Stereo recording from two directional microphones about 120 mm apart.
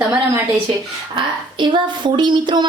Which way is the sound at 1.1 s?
40° right (ahead or behind).